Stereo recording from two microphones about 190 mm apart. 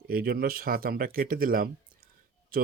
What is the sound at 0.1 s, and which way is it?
Speech, 50° right (ahead or behind).